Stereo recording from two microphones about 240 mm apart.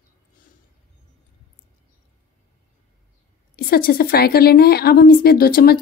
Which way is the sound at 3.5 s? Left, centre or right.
Left.